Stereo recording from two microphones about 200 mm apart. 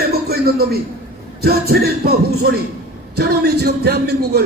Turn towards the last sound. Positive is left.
turn(degrees=-55)  # may be behind; listen again after turning